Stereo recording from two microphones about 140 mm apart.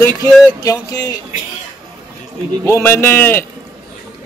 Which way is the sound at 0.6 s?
25° left (ahead or behind).